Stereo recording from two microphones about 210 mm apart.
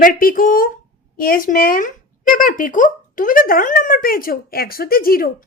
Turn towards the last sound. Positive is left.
turn(degrees=45)  # may be behind; listen again after turning